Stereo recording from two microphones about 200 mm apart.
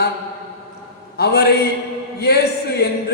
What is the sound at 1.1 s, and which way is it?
Speech, 55° left (ahead or behind).